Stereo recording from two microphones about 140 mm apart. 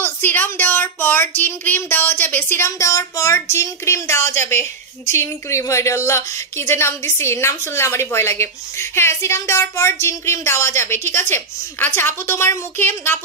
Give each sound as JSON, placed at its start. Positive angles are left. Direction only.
{"t": 0.0, "sound": "speech", "side_deg": 15}